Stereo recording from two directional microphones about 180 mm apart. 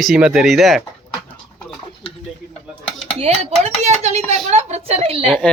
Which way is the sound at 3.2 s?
40° right (ahead or behind).